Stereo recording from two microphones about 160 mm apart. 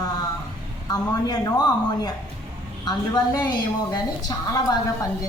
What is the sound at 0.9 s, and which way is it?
A woman's voice, 25° left (ahead or behind).